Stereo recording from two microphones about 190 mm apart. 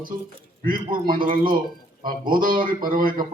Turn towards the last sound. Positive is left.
turn(degrees=-45)  # may be behind; listen again after turning